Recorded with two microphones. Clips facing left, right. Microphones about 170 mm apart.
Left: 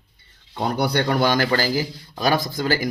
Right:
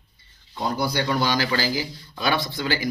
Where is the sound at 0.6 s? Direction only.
65° left (ahead or behind).